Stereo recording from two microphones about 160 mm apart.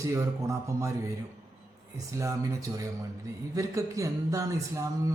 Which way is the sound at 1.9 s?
20° right (ahead or behind).